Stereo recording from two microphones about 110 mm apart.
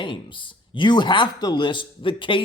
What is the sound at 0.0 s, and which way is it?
Speech, 50° left (ahead or behind).